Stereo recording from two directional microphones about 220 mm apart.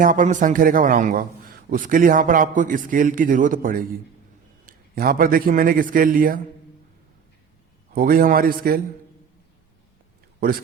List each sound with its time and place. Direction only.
0.0 s a man's voice: 35° right (ahead or behind)
7.9 s a man's voice: 40° right (ahead or behind)